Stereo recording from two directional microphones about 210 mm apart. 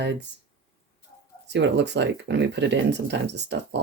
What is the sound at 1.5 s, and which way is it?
Speech, 55° right (ahead or behind).